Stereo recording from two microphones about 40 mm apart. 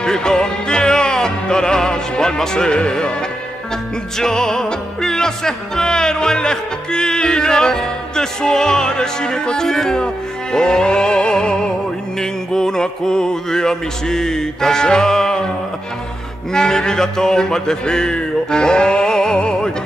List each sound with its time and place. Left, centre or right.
0.0 s music: centre
16.5 s music: centre